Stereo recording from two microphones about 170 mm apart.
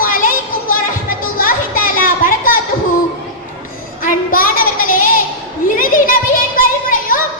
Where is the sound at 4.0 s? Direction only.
55° left (ahead or behind).